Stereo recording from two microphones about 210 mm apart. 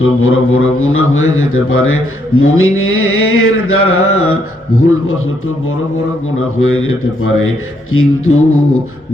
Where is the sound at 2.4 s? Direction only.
80° left.